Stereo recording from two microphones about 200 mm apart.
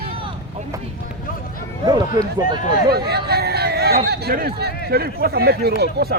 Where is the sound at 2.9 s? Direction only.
50° right (ahead or behind).